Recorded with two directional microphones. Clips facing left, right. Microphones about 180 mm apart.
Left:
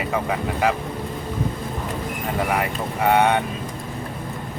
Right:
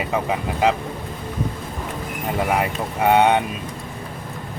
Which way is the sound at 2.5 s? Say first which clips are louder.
Right 2 dB; 20° right (ahead or behind).